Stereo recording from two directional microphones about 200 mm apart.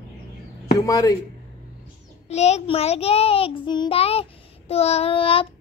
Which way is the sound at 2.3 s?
35° left (ahead or behind).